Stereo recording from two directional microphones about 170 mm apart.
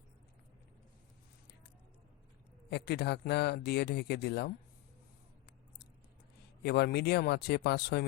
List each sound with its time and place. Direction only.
2.6 s speech: 75° left (ahead or behind)
6.6 s speech: 75° left (ahead or behind)